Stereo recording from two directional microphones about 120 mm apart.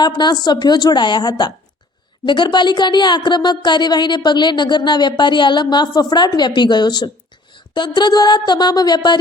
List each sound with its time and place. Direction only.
0.0 s speech: 35° left (ahead or behind)